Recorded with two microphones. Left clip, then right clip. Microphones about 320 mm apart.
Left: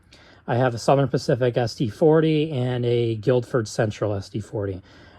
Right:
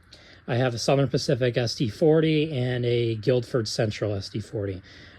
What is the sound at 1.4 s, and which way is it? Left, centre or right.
Speech, centre.